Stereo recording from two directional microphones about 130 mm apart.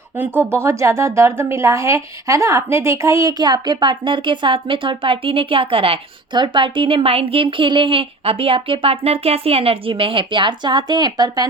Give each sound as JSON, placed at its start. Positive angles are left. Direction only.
{"t": 0.2, "sound": "a woman's voice", "side_deg": -20}